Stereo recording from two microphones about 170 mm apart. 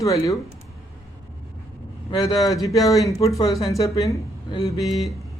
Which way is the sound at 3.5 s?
Centre (ahead or behind).